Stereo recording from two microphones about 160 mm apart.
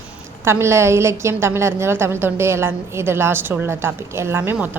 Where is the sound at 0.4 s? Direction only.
15° right (ahead or behind).